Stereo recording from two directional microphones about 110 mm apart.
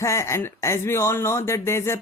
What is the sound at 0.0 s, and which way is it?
Speech, 25° left (ahead or behind).